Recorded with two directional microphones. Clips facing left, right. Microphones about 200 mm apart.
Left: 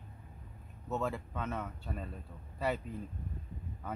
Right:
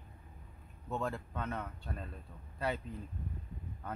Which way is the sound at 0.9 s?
5° left (ahead or behind).